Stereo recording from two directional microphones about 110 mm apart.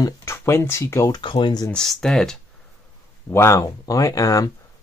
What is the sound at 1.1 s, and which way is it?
Speech, 45° left (ahead or behind).